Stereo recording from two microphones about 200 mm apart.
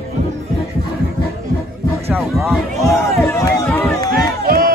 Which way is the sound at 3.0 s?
15° left (ahead or behind).